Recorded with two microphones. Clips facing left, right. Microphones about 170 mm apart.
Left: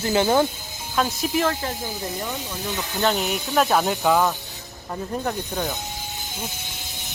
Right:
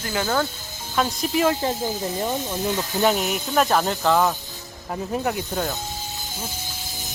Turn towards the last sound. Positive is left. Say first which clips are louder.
# right 1 dB
turn(degrees=-5)  # may be behind; listen again after turning